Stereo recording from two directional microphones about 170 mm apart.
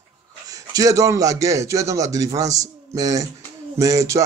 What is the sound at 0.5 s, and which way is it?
Speech, 20° right (ahead or behind).